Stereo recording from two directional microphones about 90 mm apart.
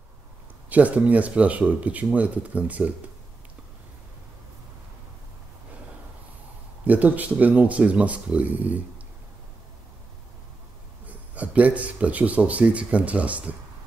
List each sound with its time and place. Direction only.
0.7 s speech: 15° right (ahead or behind)
6.9 s speech: 15° right (ahead or behind)
11.1 s speech: 15° right (ahead or behind)